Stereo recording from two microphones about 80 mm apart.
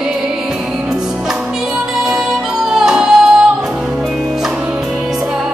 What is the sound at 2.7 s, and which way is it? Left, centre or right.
Music, centre.